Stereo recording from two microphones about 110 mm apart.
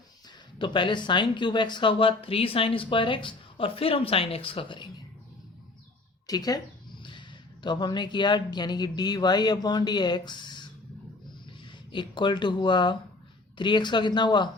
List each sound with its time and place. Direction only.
0.6 s speech: 45° left (ahead or behind)
6.2 s speech: 35° left (ahead or behind)